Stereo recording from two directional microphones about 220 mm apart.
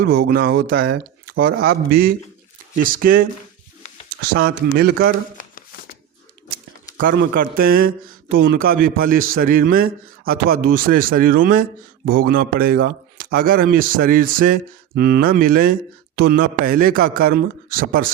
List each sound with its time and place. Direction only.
0.0 s a man's voice: 40° right (ahead or behind)
4.4 s speech: 45° right (ahead or behind)
5.4 s shuffling cards: 40° left (ahead or behind)
7.0 s a man's voice: 40° right (ahead or behind)